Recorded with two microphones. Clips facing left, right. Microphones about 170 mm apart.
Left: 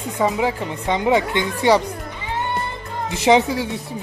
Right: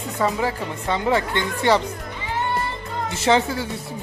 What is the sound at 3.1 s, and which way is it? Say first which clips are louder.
Speech: left 4 dB; 15° left (ahead or behind).